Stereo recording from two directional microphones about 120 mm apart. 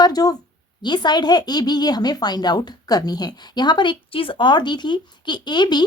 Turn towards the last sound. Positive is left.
turn(degrees=40)  # may be behind; listen again after turning